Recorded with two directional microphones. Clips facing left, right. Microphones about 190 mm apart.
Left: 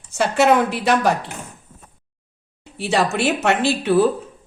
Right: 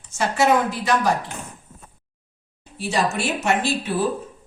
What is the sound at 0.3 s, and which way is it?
Speech, 65° left (ahead or behind).